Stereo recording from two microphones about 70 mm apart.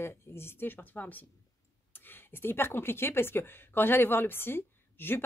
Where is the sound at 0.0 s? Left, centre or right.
Left.